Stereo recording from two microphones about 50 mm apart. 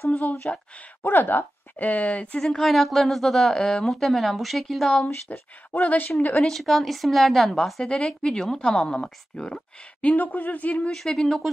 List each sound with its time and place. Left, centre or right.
0.1 s a woman's voice: left
1.0 s speech: left
2.4 s speech: centre
5.3 s speech: left
6.4 s speech: centre
7.8 s a woman's voice: centre
10.0 s speech: left
10.9 s speech: centre